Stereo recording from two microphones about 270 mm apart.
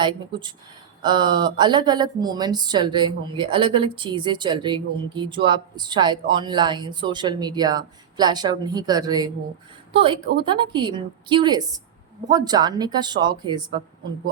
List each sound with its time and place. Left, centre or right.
0.0 s speech: centre